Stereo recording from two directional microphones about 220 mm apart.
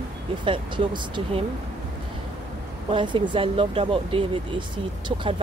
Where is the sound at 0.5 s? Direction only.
20° right (ahead or behind).